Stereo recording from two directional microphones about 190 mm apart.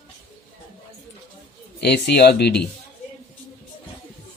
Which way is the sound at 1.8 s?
60° left (ahead or behind).